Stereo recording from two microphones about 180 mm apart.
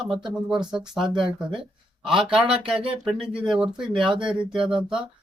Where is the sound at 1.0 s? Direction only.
25° right (ahead or behind).